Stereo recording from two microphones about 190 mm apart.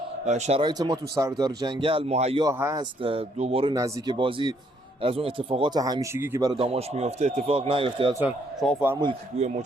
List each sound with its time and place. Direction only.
0.3 s speech: 35° right (ahead or behind)
0.6 s speech: 20° right (ahead or behind)
2.4 s speech: 15° right (ahead or behind)
3.0 s speech: 30° right (ahead or behind)
3.8 s speech: 20° right (ahead or behind)
6.6 s speech: 30° right (ahead or behind)
8.6 s a man's voice: centre (ahead or behind)
9.3 s speech: 35° right (ahead or behind)